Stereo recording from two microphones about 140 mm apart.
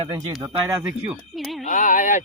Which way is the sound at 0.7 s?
20° right (ahead or behind).